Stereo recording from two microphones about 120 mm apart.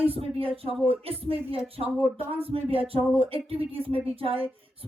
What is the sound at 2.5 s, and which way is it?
Speech, 50° right (ahead or behind).